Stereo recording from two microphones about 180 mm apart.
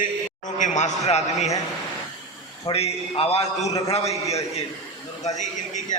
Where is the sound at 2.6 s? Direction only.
35° left (ahead or behind).